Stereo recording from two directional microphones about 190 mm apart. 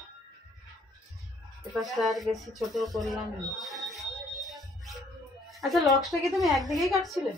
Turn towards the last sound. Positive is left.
turn(degrees=0)  # may be behind; listen again after turning